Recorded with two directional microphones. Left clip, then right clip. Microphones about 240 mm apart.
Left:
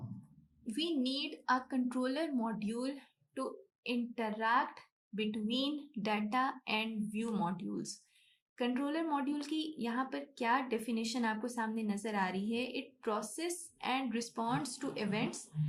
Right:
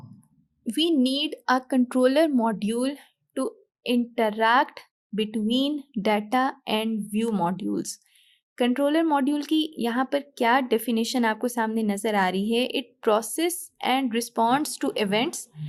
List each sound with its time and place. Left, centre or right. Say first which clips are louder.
0.7 s a woman's voice: right 13 dB; right